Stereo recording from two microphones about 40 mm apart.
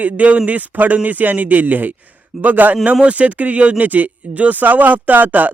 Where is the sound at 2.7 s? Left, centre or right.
Right.